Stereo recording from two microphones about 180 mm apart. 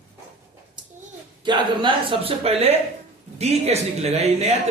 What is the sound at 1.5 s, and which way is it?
A man's voice, 30° right (ahead or behind).